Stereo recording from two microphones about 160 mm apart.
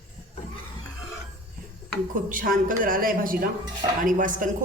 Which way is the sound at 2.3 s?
60° right (ahead or behind).